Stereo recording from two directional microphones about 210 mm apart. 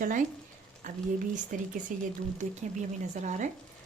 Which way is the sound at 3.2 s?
35° right (ahead or behind).